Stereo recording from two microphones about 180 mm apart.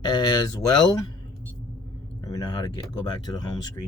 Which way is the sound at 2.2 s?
20° left (ahead or behind).